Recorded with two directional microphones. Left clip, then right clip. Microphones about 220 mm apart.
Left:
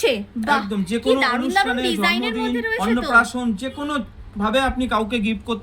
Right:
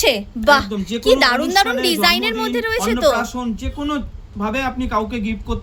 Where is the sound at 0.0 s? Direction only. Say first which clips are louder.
Right 5 dB; 50° right (ahead or behind).